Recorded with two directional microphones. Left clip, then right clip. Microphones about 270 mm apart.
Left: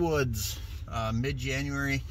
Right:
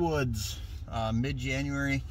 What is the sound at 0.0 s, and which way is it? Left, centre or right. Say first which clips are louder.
Speech: left 2 dB; centre.